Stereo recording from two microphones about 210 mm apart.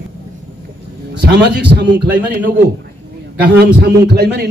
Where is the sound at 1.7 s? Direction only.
50° right (ahead or behind).